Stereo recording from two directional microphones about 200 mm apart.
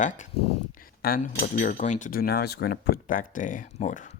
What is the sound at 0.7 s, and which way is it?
Speech, 45° left (ahead or behind).